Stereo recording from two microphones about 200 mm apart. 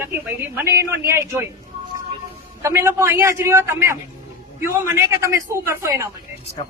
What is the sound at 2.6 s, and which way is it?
A woman's voice, 15° right (ahead or behind).